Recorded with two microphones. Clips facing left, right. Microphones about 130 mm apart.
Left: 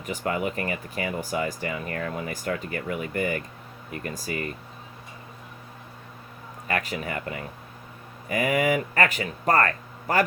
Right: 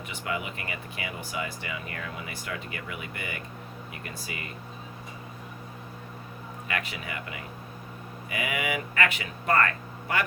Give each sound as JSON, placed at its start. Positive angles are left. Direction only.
{"t": 0.0, "sound": "speech", "side_deg": 40}
{"t": 6.7, "sound": "speech", "side_deg": 40}